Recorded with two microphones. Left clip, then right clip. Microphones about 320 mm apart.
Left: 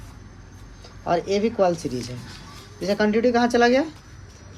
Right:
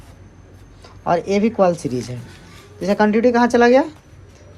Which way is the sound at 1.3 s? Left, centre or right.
Centre.